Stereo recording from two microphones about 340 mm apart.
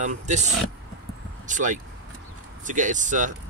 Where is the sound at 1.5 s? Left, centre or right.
Right.